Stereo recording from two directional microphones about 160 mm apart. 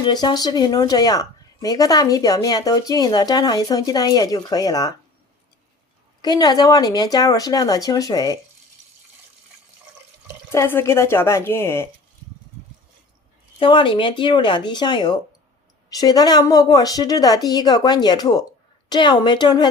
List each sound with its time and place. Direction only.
0.0 s speech: 25° left (ahead or behind)
6.2 s speech: 25° left (ahead or behind)
10.5 s a woman's voice: 15° left (ahead or behind)
13.6 s speech: 30° left (ahead or behind)